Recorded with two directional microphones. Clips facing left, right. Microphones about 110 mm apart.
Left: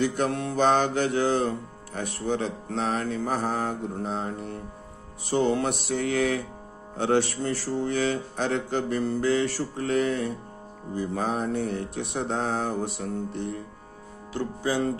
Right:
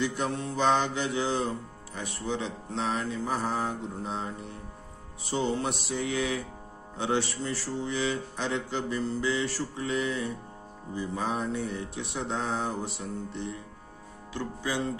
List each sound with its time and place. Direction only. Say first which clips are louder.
0.0 s music: left 4 dB; 55° left (ahead or behind)